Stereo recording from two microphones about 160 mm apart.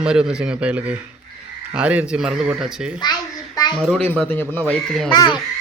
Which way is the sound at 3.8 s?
5° left (ahead or behind).